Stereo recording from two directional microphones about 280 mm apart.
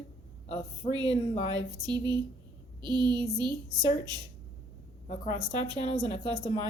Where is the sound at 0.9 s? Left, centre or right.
Centre.